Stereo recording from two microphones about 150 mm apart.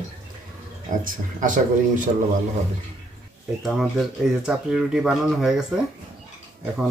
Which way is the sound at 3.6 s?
Centre (ahead or behind).